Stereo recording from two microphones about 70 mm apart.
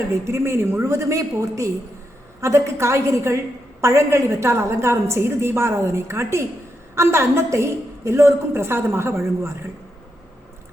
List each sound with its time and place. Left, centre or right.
0.3 s a woman's voice: right